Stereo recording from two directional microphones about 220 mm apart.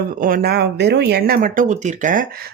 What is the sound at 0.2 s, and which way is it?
Speech, 40° right (ahead or behind).